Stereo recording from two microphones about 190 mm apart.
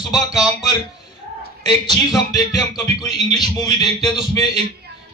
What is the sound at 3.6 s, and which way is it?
Speech, 20° left (ahead or behind).